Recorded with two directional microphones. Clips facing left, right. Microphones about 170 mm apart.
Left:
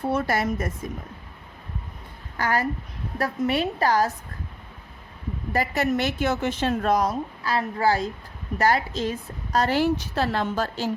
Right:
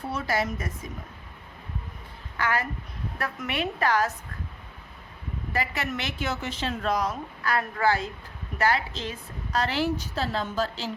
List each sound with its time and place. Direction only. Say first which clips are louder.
0.1 s a woman's voice: left 3 dB; 55° left (ahead or behind)
2.4 s a woman's voice: left 4 dB; 40° left (ahead or behind)
5.5 s a woman's voice: left 7 dB; 45° left (ahead or behind)
7.4 s a woman's voice: left 2 dB; 30° left (ahead or behind); by 9.9 s 45° left (ahead or behind)
10.0 s a woman's voice: left 4 dB; 65° left (ahead or behind); by 10.9 s 50° left (ahead or behind)